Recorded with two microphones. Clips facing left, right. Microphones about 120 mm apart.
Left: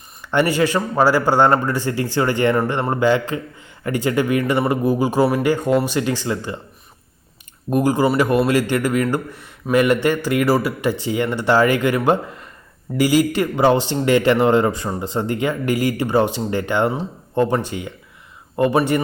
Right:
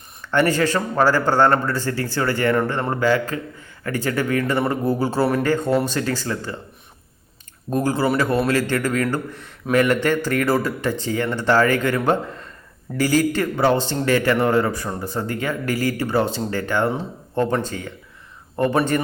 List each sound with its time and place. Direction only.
0.3 s a man's voice: 15° left (ahead or behind)
7.7 s speech: 15° left (ahead or behind)